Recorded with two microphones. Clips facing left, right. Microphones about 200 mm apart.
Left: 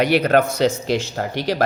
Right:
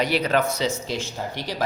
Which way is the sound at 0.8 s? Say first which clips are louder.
Left 7 dB; 75° left (ahead or behind).